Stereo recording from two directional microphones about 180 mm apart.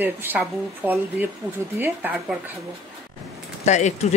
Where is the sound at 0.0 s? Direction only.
10° right (ahead or behind).